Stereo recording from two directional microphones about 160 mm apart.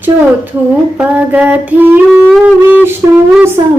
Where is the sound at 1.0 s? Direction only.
10° right (ahead or behind).